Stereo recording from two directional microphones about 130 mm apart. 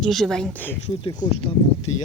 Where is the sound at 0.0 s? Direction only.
Centre (ahead or behind).